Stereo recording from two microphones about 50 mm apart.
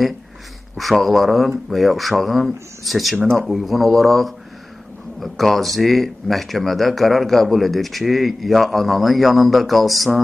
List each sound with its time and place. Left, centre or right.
0.7 s speech: centre